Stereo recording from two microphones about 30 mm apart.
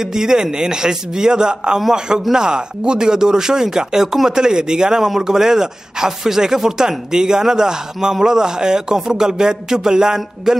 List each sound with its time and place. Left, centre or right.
0.0 s a man's voice: centre